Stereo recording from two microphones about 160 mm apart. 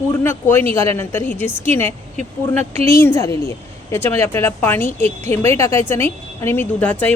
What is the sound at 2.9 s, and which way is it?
A woman's voice, 20° left (ahead or behind).